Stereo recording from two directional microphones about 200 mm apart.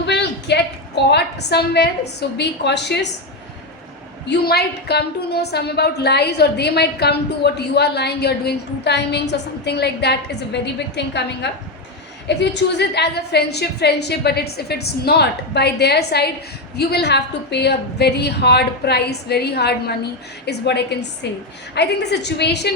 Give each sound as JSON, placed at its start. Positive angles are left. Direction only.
{"t": 0.0, "sound": "a sound", "side_deg": 60}
{"t": 2.4, "sound": "a woman's voice", "side_deg": 60}
{"t": 4.3, "sound": "a woman's voice", "side_deg": 55}